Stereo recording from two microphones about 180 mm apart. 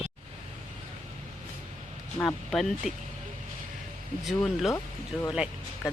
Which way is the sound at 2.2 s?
Centre (ahead or behind).